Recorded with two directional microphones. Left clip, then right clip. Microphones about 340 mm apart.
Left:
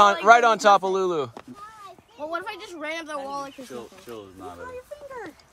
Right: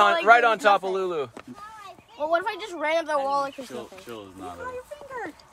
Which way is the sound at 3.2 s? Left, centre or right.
Centre.